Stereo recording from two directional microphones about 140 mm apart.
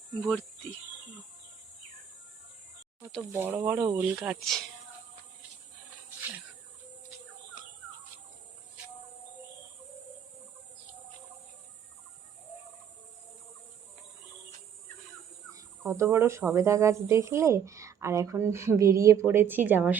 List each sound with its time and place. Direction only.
0.2 s speech: 10° left (ahead or behind)
3.4 s speech: 15° right (ahead or behind)
4.2 s speech: centre (ahead or behind)
15.9 s speech: 20° right (ahead or behind)